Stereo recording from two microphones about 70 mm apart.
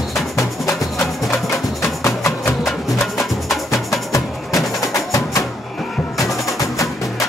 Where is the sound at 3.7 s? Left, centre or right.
Left.